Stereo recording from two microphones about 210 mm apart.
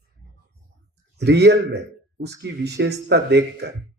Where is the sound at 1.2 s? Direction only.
55° right (ahead or behind).